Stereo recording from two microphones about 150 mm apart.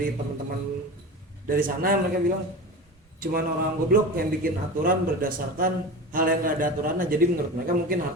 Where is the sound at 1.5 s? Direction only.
70° right (ahead or behind).